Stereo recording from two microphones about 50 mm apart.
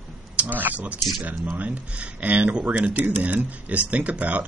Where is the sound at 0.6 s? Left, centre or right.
Right.